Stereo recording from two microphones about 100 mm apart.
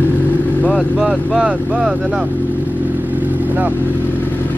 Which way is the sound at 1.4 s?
15° right (ahead or behind).